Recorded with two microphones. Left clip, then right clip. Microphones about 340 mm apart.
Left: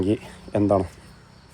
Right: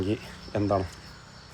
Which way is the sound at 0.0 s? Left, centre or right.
Centre.